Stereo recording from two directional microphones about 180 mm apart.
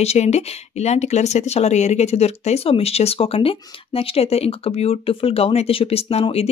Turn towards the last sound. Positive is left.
turn(degrees=35)  # may be behind; listen again after turning